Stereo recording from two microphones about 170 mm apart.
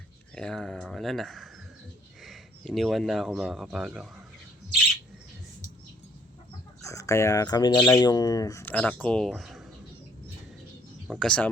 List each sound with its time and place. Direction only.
0.3 s speech: 5° left (ahead or behind)
6.8 s speech: 20° left (ahead or behind); by 9.6 s centre (ahead or behind)
11.1 s speech: 5° left (ahead or behind)